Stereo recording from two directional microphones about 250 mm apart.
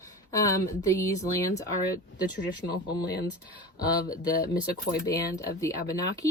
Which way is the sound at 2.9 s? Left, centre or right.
Centre.